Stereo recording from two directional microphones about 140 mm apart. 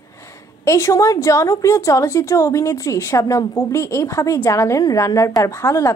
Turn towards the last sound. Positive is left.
turn(degrees=20)  # may be behind; listen again after turning